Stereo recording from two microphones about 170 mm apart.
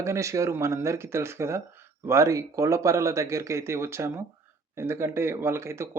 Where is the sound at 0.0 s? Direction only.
15° right (ahead or behind).